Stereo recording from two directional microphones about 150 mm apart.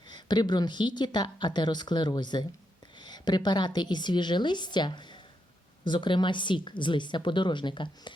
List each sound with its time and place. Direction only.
0.1 s a woman's voice: 30° left (ahead or behind)